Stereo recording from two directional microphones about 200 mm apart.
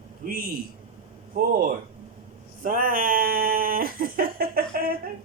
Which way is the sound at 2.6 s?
45° right (ahead or behind).